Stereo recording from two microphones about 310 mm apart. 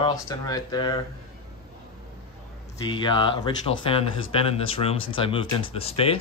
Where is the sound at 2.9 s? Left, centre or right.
Centre.